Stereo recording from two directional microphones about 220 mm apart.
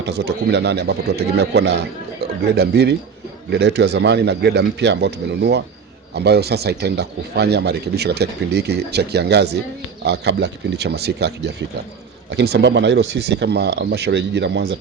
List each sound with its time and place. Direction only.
0.0 s speech: 50° right (ahead or behind)